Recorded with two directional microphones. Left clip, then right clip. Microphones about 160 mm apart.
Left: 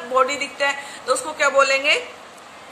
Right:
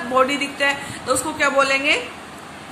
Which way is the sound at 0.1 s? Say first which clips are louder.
Right 1 dB; 25° left (ahead or behind).